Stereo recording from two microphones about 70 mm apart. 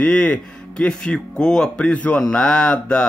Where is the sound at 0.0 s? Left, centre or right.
Centre.